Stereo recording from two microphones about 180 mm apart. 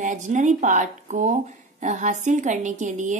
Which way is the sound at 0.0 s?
45° right (ahead or behind).